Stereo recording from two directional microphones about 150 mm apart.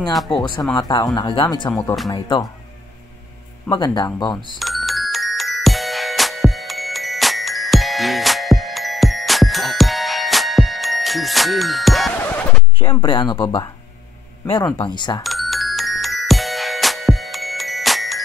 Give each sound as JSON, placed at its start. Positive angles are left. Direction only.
{"t": 0.1, "sound": "speech", "side_deg": 0}
{"t": 0.7, "sound": "speech", "side_deg": 25}
{"t": 3.7, "sound": "speech", "side_deg": 25}
{"t": 4.6, "sound": "music", "side_deg": 0}
{"t": 12.3, "sound": "a sound", "side_deg": 10}
{"t": 13.0, "sound": "speech", "side_deg": 35}
{"t": 14.8, "sound": "speech", "side_deg": 30}
{"t": 15.2, "sound": "music", "side_deg": 0}